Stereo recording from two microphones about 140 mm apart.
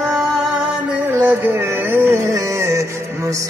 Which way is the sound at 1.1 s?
15° right (ahead or behind).